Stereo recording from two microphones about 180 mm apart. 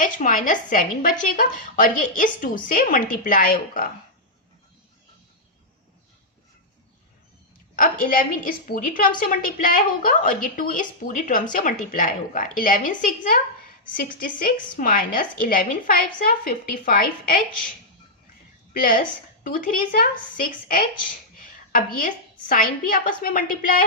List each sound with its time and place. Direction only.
0.0 s a woman's voice: 45° left (ahead or behind)
7.8 s a woman's voice: 50° left (ahead or behind)
18.7 s a woman's voice: 50° left (ahead or behind)